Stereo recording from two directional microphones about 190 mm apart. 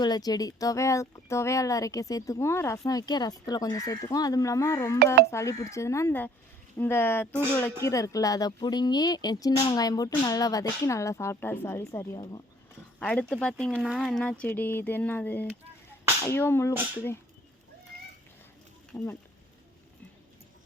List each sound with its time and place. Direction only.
0.0 s speech: 20° left (ahead or behind)
13.0 s speech: 5° left (ahead or behind)
18.9 s speech: 15° left (ahead or behind)